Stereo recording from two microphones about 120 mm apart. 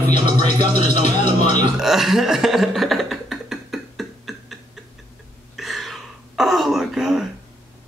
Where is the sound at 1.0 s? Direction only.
80° left.